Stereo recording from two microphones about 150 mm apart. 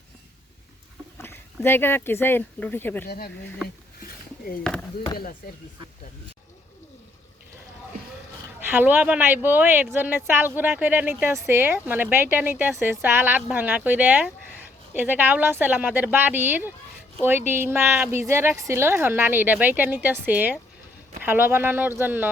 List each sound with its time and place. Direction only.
1.2 s speech: 15° left (ahead or behind)
4.6 s speech: 5° left (ahead or behind)
5.4 s speech: 90° left
8.7 s speech: 10° right (ahead or behind)